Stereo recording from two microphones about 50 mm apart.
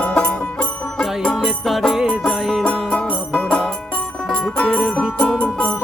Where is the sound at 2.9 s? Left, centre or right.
Left.